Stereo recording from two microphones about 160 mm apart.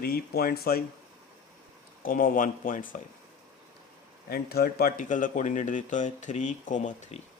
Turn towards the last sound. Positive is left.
turn(degrees=50)  # may be behind; listen again after turning